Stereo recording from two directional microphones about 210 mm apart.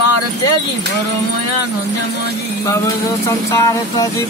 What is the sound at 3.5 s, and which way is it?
Music, 15° left (ahead or behind).